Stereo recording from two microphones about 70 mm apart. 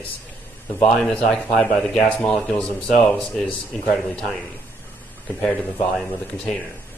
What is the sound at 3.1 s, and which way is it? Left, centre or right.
Speech, centre.